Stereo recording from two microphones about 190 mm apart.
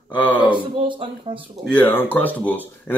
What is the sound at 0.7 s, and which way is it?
Speech, 25° right (ahead or behind).